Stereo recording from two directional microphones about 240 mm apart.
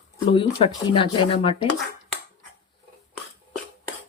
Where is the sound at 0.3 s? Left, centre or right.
Left.